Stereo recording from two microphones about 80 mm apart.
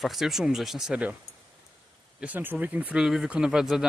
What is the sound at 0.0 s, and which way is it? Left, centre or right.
Speech, centre.